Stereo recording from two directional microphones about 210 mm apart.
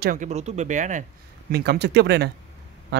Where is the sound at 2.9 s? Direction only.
55° right (ahead or behind).